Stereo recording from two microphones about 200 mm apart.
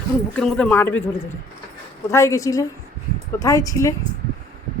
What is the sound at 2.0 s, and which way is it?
Speech, 15° left (ahead or behind).